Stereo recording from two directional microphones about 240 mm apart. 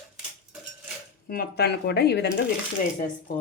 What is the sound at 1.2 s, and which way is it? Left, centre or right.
Speech, left.